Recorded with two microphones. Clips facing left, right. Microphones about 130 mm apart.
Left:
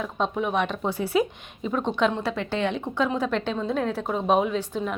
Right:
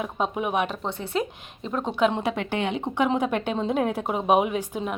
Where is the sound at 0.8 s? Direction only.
5° left (ahead or behind).